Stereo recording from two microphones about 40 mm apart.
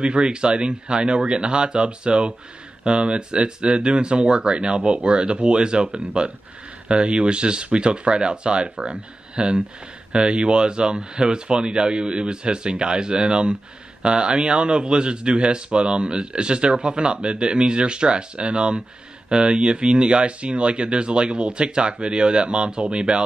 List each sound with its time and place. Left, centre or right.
0.0 s speech: right